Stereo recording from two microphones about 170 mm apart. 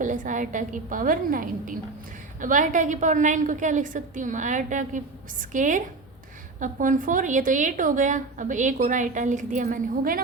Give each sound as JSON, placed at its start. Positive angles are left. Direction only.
{"t": 0.0, "sound": "a woman's voice", "side_deg": -50}